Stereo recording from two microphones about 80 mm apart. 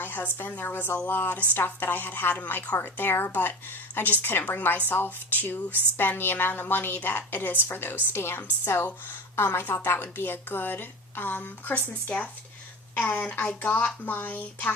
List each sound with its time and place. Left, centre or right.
0.0 s speech: left